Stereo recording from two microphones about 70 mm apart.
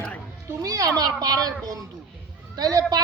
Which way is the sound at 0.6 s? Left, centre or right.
Right.